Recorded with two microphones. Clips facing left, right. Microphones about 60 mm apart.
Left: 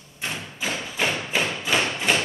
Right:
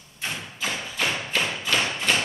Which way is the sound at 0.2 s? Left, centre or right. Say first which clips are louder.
Left 1 dB; centre.